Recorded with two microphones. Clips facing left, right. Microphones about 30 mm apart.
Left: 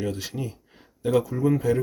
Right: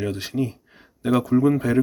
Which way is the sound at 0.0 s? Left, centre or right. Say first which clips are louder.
Right 2 dB; right.